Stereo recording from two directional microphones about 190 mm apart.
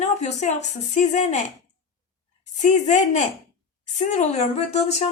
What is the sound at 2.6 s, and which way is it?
A woman's voice, 40° left (ahead or behind).